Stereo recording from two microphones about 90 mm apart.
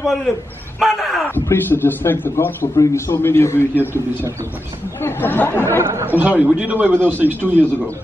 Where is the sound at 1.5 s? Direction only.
20° left (ahead or behind).